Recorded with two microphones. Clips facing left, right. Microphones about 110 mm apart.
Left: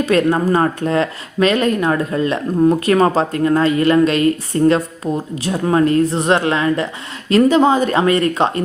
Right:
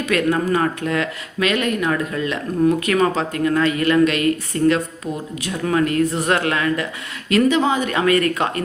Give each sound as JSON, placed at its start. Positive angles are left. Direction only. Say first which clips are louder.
{"t": 0.0, "sound": "speech", "louder": "left 4 dB", "side_deg": 30}